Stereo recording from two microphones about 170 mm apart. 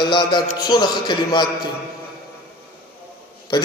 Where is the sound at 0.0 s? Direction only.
25° left (ahead or behind).